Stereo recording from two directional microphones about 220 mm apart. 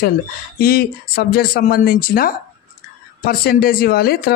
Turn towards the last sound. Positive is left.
turn(degrees=45)  # may be behind; listen again after turning